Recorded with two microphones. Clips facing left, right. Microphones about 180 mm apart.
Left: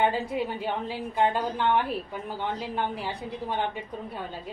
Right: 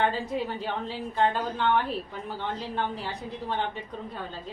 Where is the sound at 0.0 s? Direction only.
10° left (ahead or behind).